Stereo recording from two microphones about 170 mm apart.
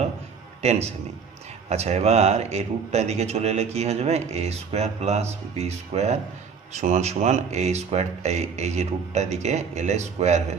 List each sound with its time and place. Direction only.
0.6 s a man's voice: 40° right (ahead or behind)